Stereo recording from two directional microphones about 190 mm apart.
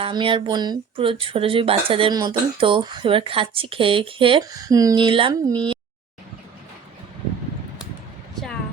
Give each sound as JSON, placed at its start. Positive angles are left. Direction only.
{"t": 0.0, "sound": "speech", "side_deg": -25}